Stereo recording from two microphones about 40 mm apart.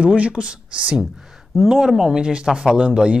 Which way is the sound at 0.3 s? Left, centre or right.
Right.